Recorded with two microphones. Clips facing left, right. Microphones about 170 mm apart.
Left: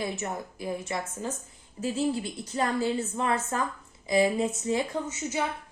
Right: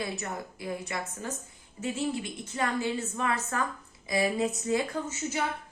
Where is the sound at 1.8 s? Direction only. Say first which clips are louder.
Left 3 dB; 35° left (ahead or behind).